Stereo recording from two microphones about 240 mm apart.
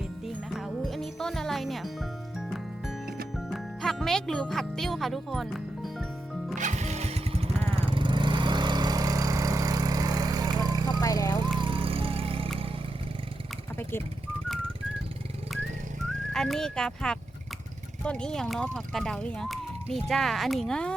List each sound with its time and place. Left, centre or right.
0.3 s music: centre
3.3 s speech: centre
6.6 s lawn mower: right
11.0 s vehicle: centre
11.4 s vehicle: centre
16.3 s speech: centre